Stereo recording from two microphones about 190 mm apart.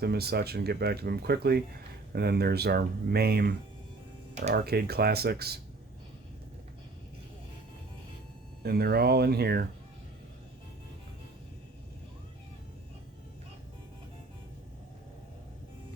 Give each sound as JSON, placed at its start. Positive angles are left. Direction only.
{"t": 0.0, "sound": "speech", "side_deg": -55}
{"t": 4.5, "sound": "speech", "side_deg": -55}
{"t": 8.6, "sound": "speech", "side_deg": -55}